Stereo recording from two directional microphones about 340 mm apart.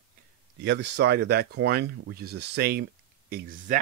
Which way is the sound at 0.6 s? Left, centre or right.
Right.